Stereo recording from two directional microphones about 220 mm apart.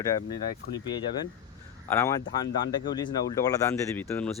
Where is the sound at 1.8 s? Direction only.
10° left (ahead or behind).